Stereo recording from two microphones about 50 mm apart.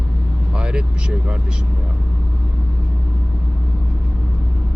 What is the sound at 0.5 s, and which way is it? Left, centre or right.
Speech, centre.